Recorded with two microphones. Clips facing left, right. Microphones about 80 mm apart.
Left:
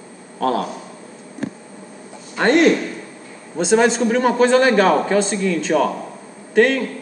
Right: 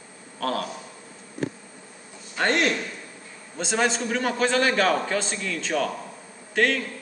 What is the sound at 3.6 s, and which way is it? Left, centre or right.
A man's voice, centre.